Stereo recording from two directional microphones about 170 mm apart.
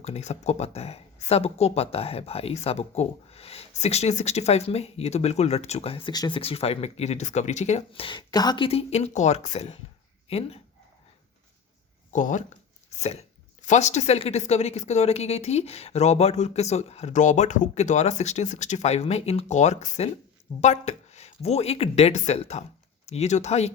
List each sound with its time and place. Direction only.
0.0 s speech: 40° left (ahead or behind)
12.1 s speech: 50° left (ahead or behind)